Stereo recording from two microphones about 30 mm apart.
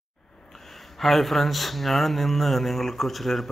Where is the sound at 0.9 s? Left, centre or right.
Centre.